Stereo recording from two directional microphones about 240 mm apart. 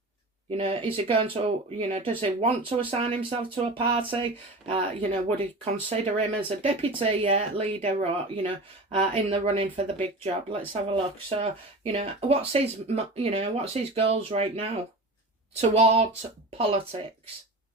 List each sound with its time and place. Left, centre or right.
0.5 s speech: right